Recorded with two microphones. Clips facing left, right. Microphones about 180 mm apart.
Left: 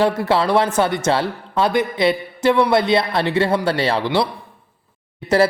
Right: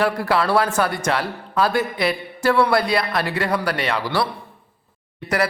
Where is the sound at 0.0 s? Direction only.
25° left (ahead or behind).